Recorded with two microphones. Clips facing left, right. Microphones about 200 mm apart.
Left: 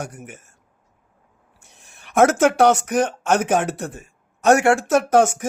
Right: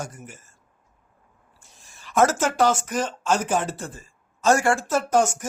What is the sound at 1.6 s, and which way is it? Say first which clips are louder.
Speech: left 2 dB; 65° left (ahead or behind).